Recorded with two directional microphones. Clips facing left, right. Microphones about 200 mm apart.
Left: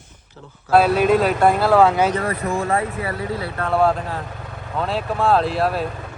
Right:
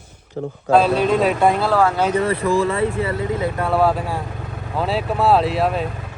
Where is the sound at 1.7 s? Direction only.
15° left (ahead or behind).